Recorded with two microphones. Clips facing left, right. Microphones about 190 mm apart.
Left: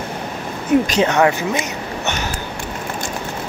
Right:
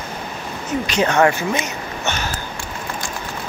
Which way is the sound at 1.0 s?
20° left (ahead or behind).